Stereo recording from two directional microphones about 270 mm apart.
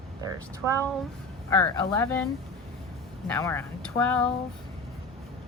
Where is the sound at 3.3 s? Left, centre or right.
Centre.